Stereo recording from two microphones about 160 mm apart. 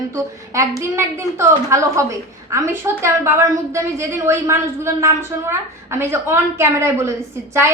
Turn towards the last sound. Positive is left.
turn(degrees=-20)  # may be behind; listen again after turning